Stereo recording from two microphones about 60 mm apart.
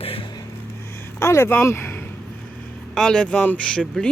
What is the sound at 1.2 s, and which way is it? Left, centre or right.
Speech, left.